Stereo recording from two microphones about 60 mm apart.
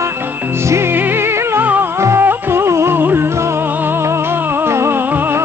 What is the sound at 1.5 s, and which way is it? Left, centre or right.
Music, right.